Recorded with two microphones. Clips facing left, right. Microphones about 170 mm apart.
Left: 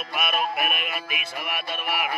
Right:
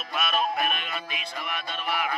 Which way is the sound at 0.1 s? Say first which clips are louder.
Even; 10° left (ahead or behind).